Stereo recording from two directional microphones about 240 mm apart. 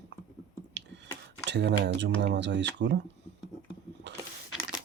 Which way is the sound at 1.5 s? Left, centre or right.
Right.